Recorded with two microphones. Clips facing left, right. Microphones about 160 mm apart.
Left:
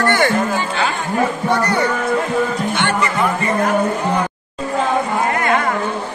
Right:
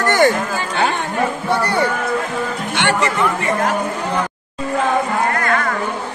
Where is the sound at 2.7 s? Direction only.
75° right (ahead or behind).